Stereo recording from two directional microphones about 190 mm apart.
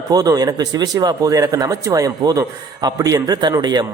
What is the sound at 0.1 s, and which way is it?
Speech, 20° right (ahead or behind).